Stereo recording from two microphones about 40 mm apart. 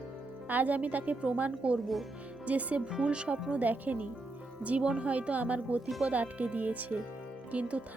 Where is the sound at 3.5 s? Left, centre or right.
Right.